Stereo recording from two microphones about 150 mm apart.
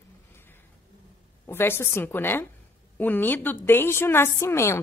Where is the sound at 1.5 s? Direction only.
15° left (ahead or behind).